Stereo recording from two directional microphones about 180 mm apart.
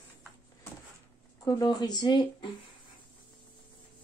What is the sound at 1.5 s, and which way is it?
Speech, 20° left (ahead or behind).